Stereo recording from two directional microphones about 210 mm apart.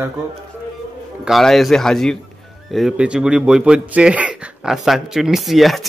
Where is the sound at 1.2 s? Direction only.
Centre (ahead or behind).